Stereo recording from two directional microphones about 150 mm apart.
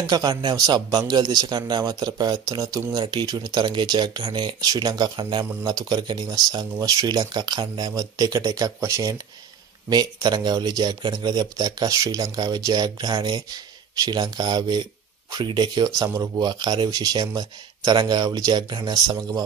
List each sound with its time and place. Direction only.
0.0 s a man's voice: 25° right (ahead or behind)